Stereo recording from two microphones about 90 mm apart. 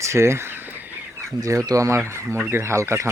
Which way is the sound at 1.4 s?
40° right (ahead or behind).